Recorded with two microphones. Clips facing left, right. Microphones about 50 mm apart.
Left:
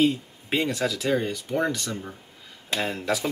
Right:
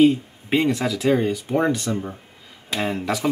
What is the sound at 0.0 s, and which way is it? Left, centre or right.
Speech, centre.